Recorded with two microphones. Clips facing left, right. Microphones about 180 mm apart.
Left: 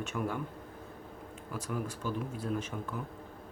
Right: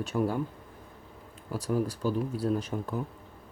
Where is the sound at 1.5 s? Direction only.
35° right (ahead or behind).